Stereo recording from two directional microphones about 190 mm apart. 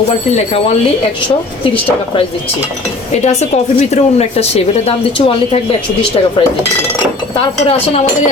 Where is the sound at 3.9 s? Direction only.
35° left (ahead or behind).